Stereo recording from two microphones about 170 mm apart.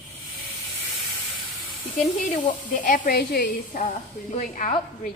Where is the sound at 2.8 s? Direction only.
50° left (ahead or behind).